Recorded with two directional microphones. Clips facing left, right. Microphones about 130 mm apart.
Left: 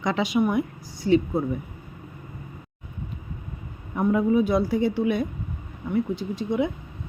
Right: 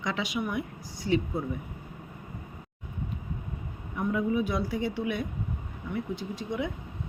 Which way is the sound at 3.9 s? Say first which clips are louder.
Left 7 dB; 40° left (ahead or behind).